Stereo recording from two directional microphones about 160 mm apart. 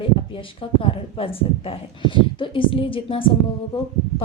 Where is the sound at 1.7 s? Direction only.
30° left (ahead or behind).